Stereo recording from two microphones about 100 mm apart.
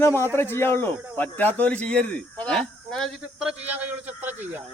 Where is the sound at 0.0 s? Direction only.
25° left (ahead or behind); by 3.1 s 5° left (ahead or behind).